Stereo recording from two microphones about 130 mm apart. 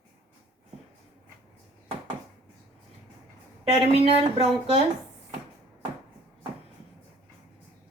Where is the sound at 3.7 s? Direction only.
50° right (ahead or behind).